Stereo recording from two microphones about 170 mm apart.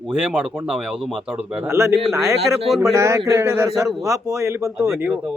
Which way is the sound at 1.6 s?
15° right (ahead or behind).